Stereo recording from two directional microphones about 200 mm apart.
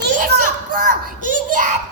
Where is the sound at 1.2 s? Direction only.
40° right (ahead or behind).